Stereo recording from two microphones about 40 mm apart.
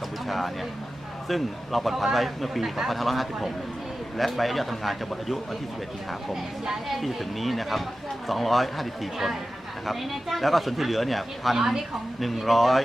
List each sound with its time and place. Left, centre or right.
0.3 s speech: centre
6.8 s speech: centre
11.5 s a woman's voice: centre
12.2 s speech: centre